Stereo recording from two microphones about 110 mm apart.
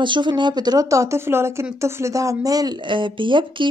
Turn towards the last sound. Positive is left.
turn(degrees=-50)  # may be behind; listen again after turning